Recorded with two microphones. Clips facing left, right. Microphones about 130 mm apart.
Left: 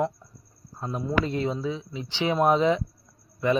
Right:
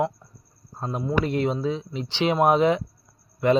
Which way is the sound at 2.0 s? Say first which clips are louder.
Right 2 dB; 20° right (ahead or behind).